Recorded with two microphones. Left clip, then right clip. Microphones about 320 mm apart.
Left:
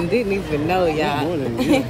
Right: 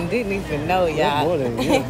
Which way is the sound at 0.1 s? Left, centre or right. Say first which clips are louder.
Left 2 dB; centre.